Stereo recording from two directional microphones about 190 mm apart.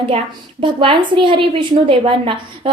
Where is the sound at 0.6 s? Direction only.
30° right (ahead or behind).